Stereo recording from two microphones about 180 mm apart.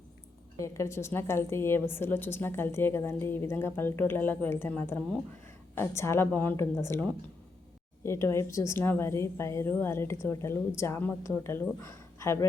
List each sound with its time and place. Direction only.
0.6 s a woman's voice: 15° left (ahead or behind)